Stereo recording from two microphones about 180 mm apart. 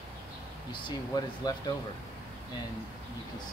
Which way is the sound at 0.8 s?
20° left (ahead or behind).